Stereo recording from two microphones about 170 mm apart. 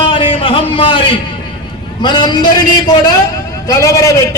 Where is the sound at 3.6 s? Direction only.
20° left (ahead or behind).